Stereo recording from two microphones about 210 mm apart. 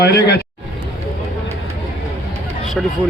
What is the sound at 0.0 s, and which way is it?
Speech, 50° left (ahead or behind).